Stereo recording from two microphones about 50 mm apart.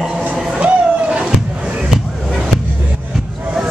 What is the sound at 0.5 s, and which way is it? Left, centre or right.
Vehicle, right.